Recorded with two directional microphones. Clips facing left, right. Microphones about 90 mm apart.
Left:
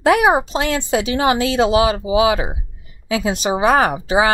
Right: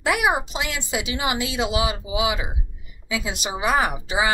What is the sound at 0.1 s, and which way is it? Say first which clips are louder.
A woman's voice: left 6 dB; 35° left (ahead or behind).